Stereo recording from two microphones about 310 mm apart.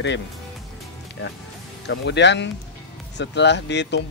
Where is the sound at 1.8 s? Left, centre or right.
Left.